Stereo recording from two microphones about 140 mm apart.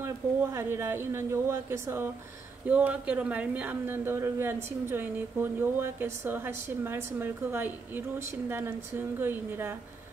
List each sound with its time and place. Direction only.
0.0 s speech: 20° right (ahead or behind)
2.7 s speech: 10° right (ahead or behind)